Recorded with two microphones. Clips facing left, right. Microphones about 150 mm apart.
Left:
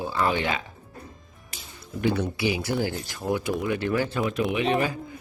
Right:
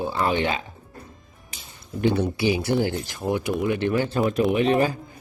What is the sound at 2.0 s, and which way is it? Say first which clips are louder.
Speech: right 3 dB; 30° right (ahead or behind).